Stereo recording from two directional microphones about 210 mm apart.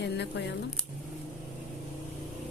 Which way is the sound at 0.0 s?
55° left (ahead or behind).